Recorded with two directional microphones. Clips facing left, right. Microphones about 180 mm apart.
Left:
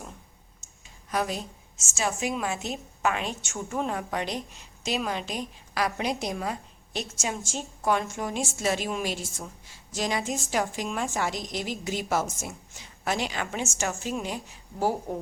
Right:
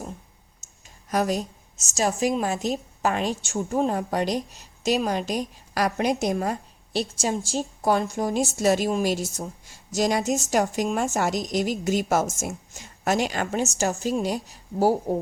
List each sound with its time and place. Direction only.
1.1 s a woman's voice: 40° right (ahead or behind)
7.0 s a woman's voice: 35° right (ahead or behind)